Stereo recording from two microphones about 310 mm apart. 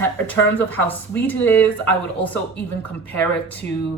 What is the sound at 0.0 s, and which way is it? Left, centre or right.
A woman's voice, centre.